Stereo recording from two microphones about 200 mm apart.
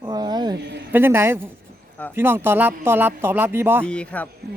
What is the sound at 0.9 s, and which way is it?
Speech, 10° right (ahead or behind).